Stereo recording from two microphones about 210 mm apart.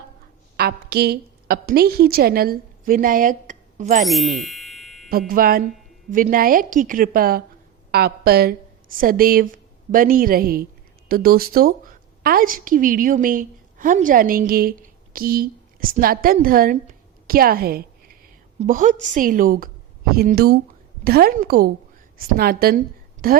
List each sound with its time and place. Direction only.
0.5 s a woman's voice: 50° right (ahead or behind)
4.0 s music: centre (ahead or behind)
5.3 s a woman's voice: 45° right (ahead or behind)